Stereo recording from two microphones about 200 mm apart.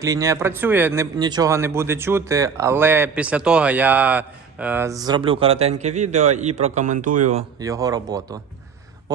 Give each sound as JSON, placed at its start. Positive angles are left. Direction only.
{"t": 0.0, "sound": "speech", "side_deg": -15}
{"t": 7.6, "sound": "speech", "side_deg": -15}